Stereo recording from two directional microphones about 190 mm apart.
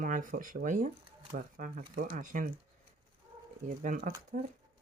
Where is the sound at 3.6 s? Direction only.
45° right (ahead or behind).